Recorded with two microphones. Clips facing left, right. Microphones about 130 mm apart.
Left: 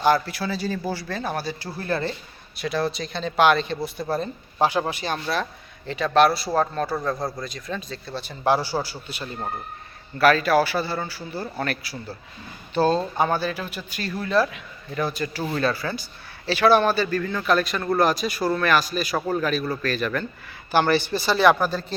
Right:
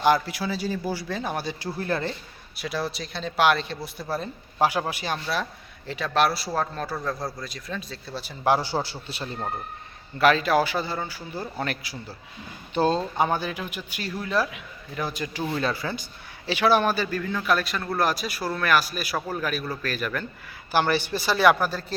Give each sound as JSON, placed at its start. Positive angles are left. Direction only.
{"t": 0.0, "sound": "a man's voice", "side_deg": -15}
{"t": 2.6, "sound": "a man's voice", "side_deg": -5}